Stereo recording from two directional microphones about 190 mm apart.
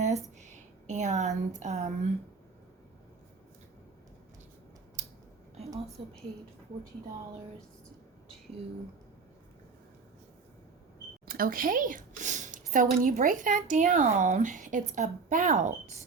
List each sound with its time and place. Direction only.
0.0 s a sound: 40° right (ahead or behind)
6.0 s a woman's voice: 25° right (ahead or behind)
11.3 s speech: 50° right (ahead or behind)